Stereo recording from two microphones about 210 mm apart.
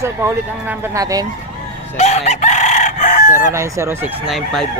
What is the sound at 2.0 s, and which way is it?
Chicken, 30° left (ahead or behind).